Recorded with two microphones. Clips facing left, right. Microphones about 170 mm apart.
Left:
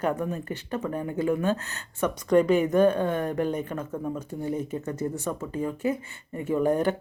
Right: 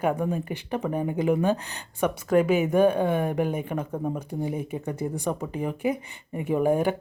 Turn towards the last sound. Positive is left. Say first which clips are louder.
# right 1 dB
turn(degrees=-10)  # may be behind; listen again after turning